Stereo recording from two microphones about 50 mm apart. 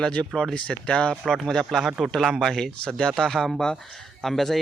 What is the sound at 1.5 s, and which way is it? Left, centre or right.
Speech, centre.